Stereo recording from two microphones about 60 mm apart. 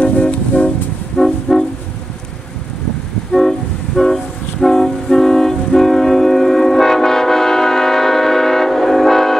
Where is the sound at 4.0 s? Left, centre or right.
Centre.